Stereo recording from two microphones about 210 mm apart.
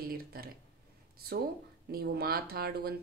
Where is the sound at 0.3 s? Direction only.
45° right (ahead or behind).